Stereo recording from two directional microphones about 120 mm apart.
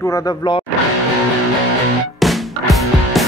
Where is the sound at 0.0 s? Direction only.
30° left (ahead or behind).